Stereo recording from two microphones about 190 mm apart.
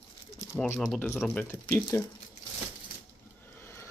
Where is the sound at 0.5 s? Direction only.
5° left (ahead or behind).